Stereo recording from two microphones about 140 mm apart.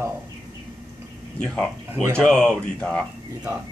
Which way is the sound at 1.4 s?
5° left (ahead or behind).